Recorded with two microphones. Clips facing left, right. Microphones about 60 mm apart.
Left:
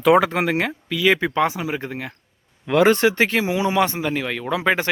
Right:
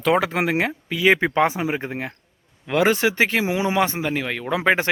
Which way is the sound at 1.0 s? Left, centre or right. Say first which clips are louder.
Right 1 dB; right.